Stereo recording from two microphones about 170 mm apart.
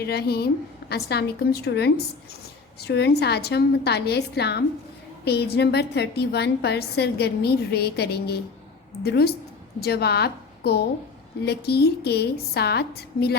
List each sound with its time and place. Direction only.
0.0 s a woman's voice: 70° left (ahead or behind)